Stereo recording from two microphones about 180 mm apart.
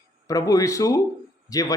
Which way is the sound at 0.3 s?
20° left (ahead or behind).